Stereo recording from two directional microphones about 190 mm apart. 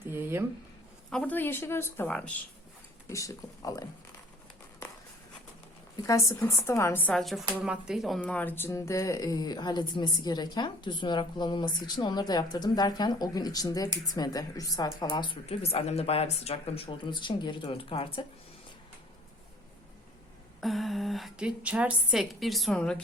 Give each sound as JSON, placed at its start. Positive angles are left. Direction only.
{"t": 0.1, "sound": "a sound", "side_deg": -10}
{"t": 1.1, "sound": "a woman's voice", "side_deg": 10}
{"t": 3.1, "sound": "a woman's voice", "side_deg": 15}
{"t": 6.0, "sound": "a woman's voice", "side_deg": 15}
{"t": 8.2, "sound": "speech", "side_deg": 10}
{"t": 20.6, "sound": "a woman's voice", "side_deg": 0}